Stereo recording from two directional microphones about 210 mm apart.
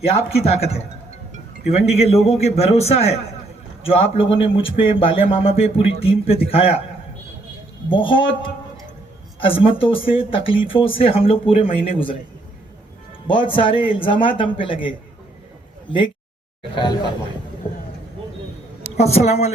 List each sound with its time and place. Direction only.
0.3 s speech: 30° left (ahead or behind)
7.9 s speech: 25° left (ahead or behind)
9.4 s speech: 25° left (ahead or behind)
13.2 s speech: 25° left (ahead or behind)
16.7 s speech: 20° left (ahead or behind)
18.9 s speech: 30° left (ahead or behind)